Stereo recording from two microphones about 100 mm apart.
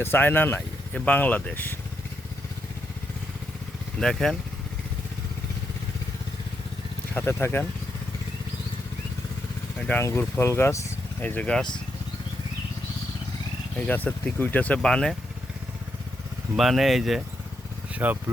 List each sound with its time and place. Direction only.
0.0 s speech: 20° left (ahead or behind)
4.0 s speech: 5° left (ahead or behind)
7.1 s speech: 20° left (ahead or behind)
10.0 s speech: 25° left (ahead or behind)
11.2 s speech: 15° left (ahead or behind)
13.7 s speech: 15° left (ahead or behind)
16.6 s speech: centre (ahead or behind)
17.9 s speech: 15° right (ahead or behind)